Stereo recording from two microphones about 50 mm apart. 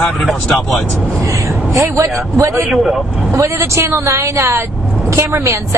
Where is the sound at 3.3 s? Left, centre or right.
Right.